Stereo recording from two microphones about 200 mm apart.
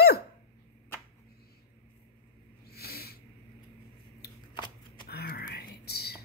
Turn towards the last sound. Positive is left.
turn(degrees=55)  # may be behind; listen again after turning